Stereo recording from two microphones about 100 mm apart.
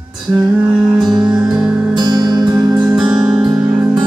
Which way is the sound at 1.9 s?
45° right (ahead or behind).